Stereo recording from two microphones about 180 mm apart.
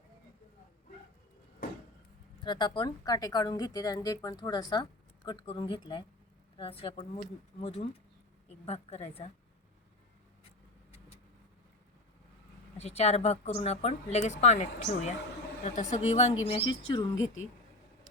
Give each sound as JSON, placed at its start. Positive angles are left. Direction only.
{"t": 2.4, "sound": "a woman's voice", "side_deg": 25}
{"t": 12.7, "sound": "a woman's voice", "side_deg": 35}